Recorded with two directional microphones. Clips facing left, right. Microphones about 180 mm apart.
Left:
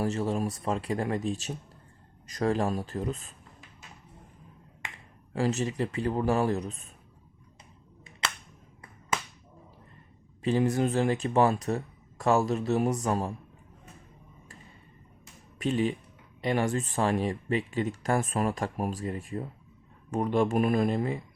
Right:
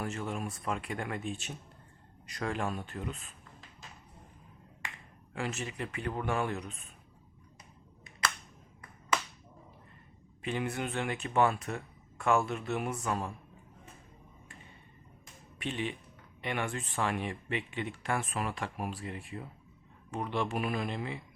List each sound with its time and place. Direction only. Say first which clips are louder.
0.0 s speech: left 8 dB; 35° left (ahead or behind)
5.3 s speech: left 9 dB; 35° left (ahead or behind)
10.4 s speech: left 9 dB; 35° left (ahead or behind)
15.5 s speech: left 9 dB; 40° left (ahead or behind)